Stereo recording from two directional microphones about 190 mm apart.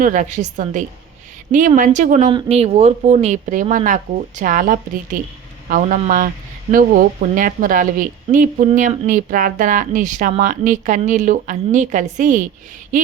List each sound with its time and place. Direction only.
0.0 s speech: 40° right (ahead or behind)